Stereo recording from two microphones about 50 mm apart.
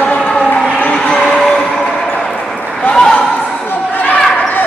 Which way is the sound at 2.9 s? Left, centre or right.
Centre.